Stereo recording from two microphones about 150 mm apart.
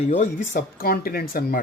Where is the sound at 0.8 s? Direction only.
80° left.